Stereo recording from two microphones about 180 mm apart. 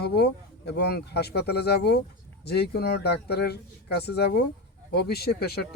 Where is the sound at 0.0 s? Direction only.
65° left (ahead or behind).